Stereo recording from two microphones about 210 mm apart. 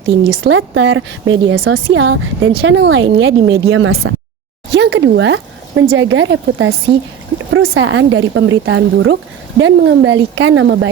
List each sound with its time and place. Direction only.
0.0 s speech: 65° right (ahead or behind)
2.6 s speech: 60° right (ahead or behind)
4.7 s speech: 55° right (ahead or behind)